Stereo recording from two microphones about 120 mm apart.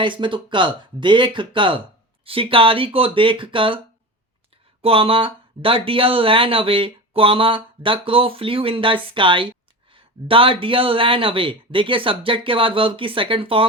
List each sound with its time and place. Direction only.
0.0 s speech: 45° right (ahead or behind)
4.8 s speech: 50° right (ahead or behind)